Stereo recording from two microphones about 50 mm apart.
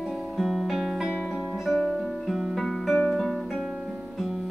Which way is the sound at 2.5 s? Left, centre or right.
Centre.